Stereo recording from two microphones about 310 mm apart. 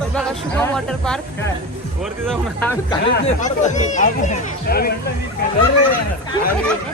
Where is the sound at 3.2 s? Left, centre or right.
Left.